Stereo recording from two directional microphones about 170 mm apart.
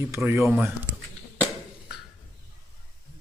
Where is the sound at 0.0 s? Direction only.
15° right (ahead or behind).